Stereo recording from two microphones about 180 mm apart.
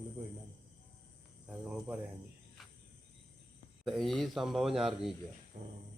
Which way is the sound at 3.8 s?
Centre (ahead or behind).